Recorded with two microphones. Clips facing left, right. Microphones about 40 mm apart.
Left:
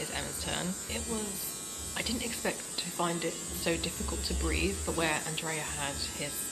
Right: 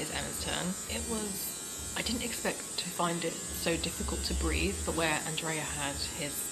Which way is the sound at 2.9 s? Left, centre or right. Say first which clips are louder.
Even; right.